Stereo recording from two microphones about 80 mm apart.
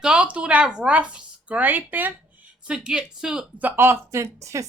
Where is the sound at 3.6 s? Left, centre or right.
Right.